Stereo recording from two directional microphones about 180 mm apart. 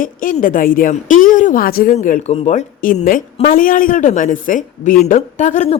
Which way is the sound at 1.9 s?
40° left (ahead or behind).